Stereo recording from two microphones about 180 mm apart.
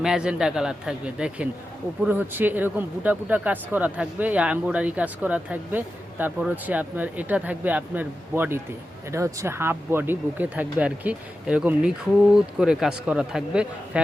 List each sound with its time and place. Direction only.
0.0 s a man's voice: 5° right (ahead or behind)